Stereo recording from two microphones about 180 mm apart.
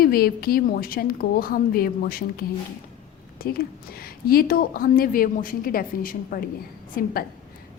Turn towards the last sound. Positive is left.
turn(degrees=55)  # may be behind; listen again after turning